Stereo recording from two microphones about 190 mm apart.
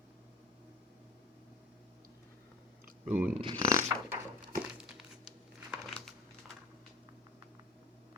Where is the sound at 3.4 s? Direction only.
20° right (ahead or behind).